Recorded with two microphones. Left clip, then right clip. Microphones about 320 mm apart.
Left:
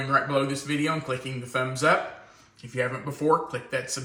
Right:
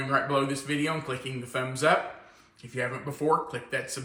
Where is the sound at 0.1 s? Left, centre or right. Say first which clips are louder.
Left 2 dB; centre.